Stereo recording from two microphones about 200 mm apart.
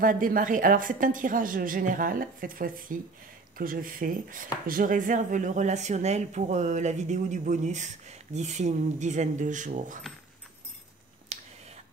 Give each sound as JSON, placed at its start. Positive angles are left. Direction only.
{"t": 0.0, "sound": "a woman's voice", "side_deg": -45}
{"t": 11.3, "sound": "whispering", "side_deg": -35}